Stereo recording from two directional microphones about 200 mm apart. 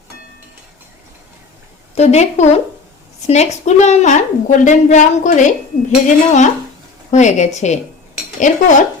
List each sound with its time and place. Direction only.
2.0 s a woman's voice: 35° left (ahead or behind)